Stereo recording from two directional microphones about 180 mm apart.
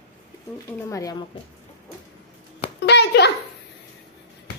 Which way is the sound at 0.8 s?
15° left (ahead or behind).